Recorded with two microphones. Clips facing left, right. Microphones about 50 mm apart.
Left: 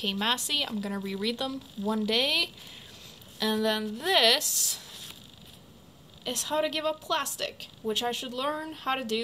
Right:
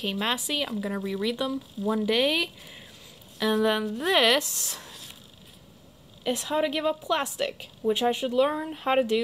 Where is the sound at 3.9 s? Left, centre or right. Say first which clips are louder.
Right 2 dB; centre.